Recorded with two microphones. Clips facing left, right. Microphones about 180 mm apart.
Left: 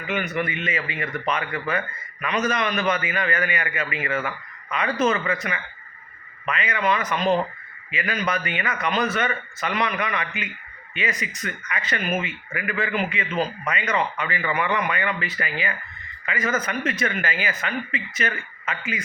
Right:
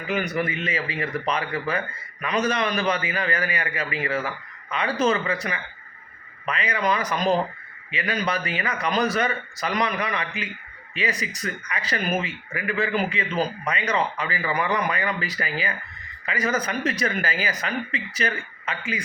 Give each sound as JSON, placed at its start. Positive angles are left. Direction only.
{"t": 0.1, "sound": "speech", "side_deg": -35}